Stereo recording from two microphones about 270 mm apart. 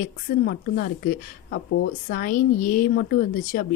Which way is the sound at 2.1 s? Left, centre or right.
Left.